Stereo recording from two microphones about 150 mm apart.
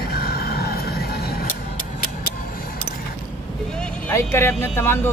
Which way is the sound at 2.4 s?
70° left (ahead or behind).